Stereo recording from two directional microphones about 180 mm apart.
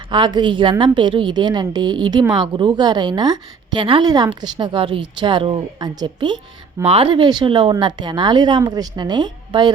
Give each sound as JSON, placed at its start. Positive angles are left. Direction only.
{"t": 0.1, "sound": "speech", "side_deg": -25}